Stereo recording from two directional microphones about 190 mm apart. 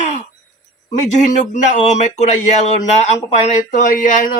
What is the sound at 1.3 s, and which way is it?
Speech, 40° left (ahead or behind).